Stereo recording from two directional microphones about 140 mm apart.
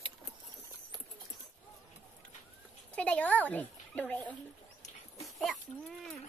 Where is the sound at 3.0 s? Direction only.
10° left (ahead or behind).